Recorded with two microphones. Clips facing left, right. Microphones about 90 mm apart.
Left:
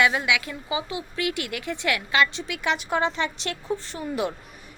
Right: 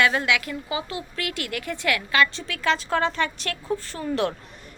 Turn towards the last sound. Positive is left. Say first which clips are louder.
# right 1 dB
turn(degrees=20)  # may be behind; listen again after turning